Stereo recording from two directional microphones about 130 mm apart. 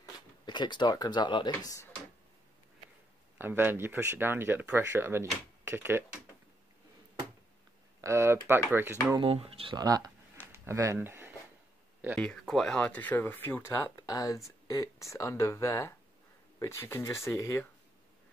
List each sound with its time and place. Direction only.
0.5 s speech: 35° left (ahead or behind)
3.3 s speech: 15° right (ahead or behind)
8.0 s speech: 20° right (ahead or behind)
9.2 s speech: 50° right (ahead or behind)
9.8 s speech: 30° right (ahead or behind)
10.5 s a sound: 20° right (ahead or behind)
12.2 s speech: 5° left (ahead or behind); by 17.6 s 20° left (ahead or behind)